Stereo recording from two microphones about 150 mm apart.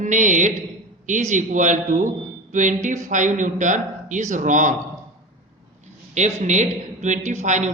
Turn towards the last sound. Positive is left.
turn(degrees=-55)  # may be behind; listen again after turning